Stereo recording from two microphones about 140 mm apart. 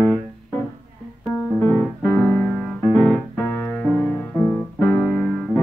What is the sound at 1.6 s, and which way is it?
Music, 15° left (ahead or behind).